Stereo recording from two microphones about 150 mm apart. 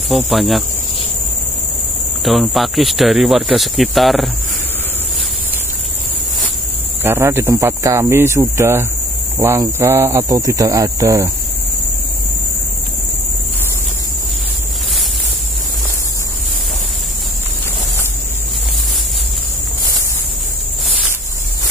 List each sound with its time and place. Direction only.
0.1 s speech: centre (ahead or behind)
2.2 s speech: centre (ahead or behind)
7.0 s speech: 15° right (ahead or behind)